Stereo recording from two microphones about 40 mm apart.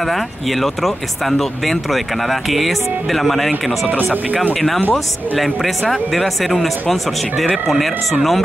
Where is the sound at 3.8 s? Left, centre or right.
Right.